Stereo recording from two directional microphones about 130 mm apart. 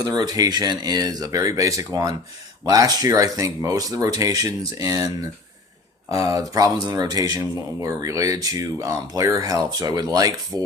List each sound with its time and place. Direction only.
0.0 s speech: 30° right (ahead or behind)